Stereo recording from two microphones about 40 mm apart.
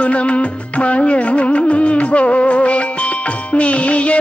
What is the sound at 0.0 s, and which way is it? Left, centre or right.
Music, left.